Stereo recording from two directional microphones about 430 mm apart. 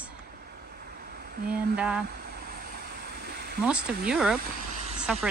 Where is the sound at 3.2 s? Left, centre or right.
Right.